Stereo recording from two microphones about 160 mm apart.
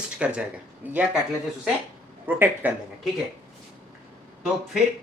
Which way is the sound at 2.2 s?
10° right (ahead or behind).